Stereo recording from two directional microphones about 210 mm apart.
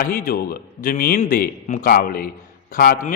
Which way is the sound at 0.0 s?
45° left (ahead or behind).